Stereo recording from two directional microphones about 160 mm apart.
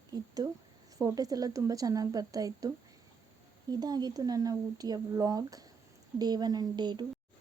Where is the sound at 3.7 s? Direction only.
25° right (ahead or behind).